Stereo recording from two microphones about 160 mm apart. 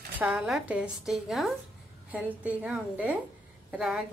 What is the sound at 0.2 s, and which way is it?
A woman's voice, 5° right (ahead or behind).